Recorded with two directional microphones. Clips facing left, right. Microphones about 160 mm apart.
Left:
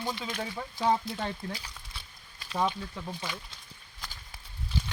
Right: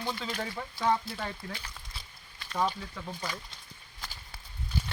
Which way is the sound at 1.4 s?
35° left (ahead or behind).